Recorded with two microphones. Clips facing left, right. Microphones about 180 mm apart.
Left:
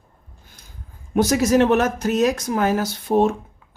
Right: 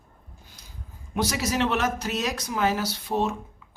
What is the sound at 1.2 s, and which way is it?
Speech, 50° left (ahead or behind).